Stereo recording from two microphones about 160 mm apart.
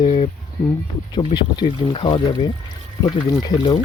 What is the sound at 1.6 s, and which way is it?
Speech, 30° left (ahead or behind).